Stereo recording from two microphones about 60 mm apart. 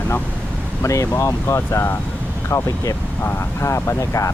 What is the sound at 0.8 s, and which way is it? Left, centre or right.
Speech, left.